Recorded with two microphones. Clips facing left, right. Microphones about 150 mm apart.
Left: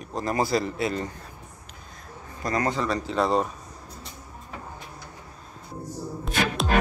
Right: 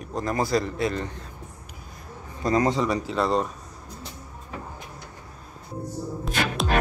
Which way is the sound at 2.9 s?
Centre (ahead or behind).